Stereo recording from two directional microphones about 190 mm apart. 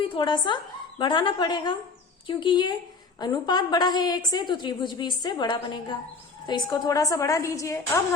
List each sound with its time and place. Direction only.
0.1 s a woman's voice: 25° left (ahead or behind)